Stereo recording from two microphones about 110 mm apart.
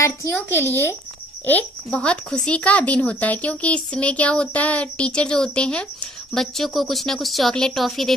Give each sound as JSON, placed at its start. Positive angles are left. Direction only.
{"t": 0.0, "sound": "speech", "side_deg": 25}